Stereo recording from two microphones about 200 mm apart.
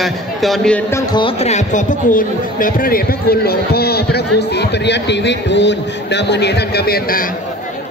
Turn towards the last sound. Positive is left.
turn(degrees=45)  # may be behind; listen again after turning